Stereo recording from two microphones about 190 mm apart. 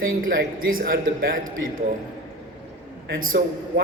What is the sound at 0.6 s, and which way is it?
Speech, 45° right (ahead or behind).